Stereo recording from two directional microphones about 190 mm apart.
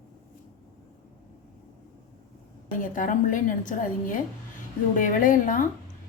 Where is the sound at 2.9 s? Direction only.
45° left (ahead or behind).